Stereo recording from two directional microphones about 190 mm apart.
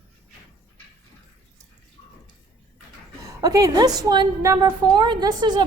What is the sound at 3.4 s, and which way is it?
A woman's voice, 20° right (ahead or behind).